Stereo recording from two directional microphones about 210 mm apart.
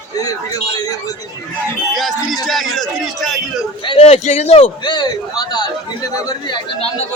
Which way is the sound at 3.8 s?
25° left (ahead or behind).